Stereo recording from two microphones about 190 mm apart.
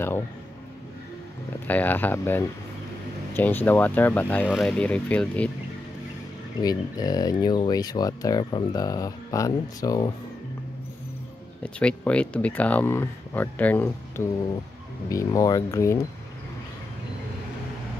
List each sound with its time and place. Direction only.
1.7 s speech: 10° left (ahead or behind)
6.6 s speech: 20° left (ahead or behind)
11.6 s speech: 5° left (ahead or behind)